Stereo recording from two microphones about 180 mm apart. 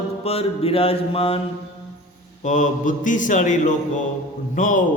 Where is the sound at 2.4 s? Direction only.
45° left (ahead or behind).